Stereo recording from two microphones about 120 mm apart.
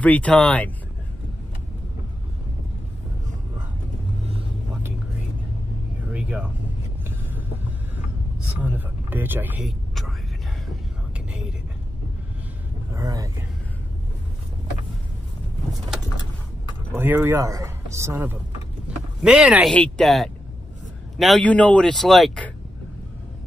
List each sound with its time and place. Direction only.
0.0 s speech: 10° left (ahead or behind)
6.1 s a sound: 10° right (ahead or behind)
8.5 s speech: 15° right (ahead or behind)
9.7 s vehicle: centre (ahead or behind)
12.9 s speech: 30° right (ahead or behind)
16.9 s speech: 15° right (ahead or behind)
18.9 s vehicle: 5° right (ahead or behind)
19.7 s speech: 5° left (ahead or behind)
21.5 s speech: 10° left (ahead or behind)